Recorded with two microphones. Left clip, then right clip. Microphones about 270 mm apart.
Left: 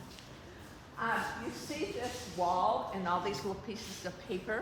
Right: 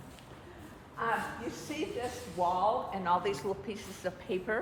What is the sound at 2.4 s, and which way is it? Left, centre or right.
A woman's voice, right.